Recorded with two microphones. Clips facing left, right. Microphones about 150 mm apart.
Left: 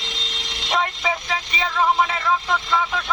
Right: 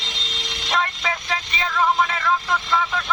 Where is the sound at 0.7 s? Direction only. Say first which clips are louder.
Left 1 dB; 15° left (ahead or behind).